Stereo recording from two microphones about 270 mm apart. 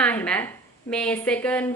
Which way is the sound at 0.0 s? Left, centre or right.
Centre.